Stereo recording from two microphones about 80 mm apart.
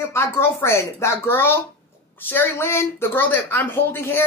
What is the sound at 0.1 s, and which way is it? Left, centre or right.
A woman's voice, left.